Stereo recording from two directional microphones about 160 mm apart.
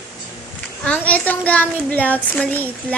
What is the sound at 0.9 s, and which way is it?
Speech, 10° left (ahead or behind).